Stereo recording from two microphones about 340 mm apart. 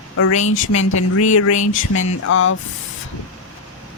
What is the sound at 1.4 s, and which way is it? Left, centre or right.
Speech, left.